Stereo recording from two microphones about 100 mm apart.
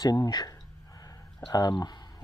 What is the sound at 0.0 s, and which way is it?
Speech, 40° left (ahead or behind).